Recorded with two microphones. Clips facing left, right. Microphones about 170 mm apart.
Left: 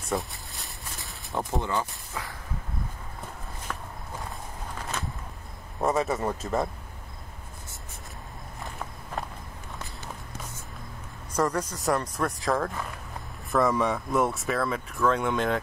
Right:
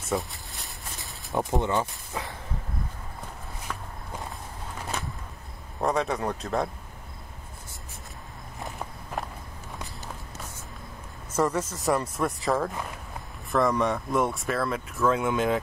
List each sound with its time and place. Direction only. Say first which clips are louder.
0.1 s a sound: right 1 dB; centre (ahead or behind)
1.3 s speech: right 3 dB; 20° right (ahead or behind)
3.7 s walk: even; centre (ahead or behind)
5.8 s speech: left 1 dB; centre (ahead or behind)
11.3 s speech: right 1 dB; 5° right (ahead or behind)